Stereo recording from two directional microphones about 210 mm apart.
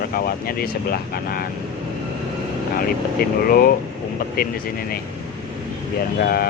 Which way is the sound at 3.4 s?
45° left (ahead or behind).